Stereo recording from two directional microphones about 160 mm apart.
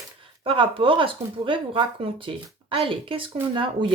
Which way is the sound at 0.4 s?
35° right (ahead or behind).